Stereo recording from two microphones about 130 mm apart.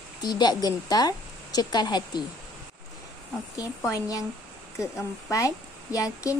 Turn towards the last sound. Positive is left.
turn(degrees=25)  # may be behind; listen again after turning